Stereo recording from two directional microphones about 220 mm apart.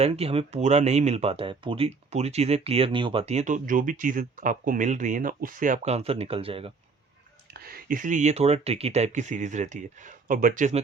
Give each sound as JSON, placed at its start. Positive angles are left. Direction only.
{"t": 0.0, "sound": "speech", "side_deg": -25}
{"t": 7.5, "sound": "speech", "side_deg": -45}